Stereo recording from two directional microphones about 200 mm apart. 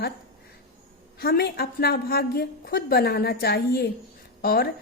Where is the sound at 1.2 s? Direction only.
50° left (ahead or behind).